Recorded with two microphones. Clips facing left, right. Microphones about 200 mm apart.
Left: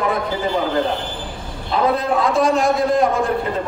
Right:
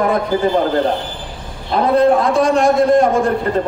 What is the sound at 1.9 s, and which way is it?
A man's voice, centre (ahead or behind).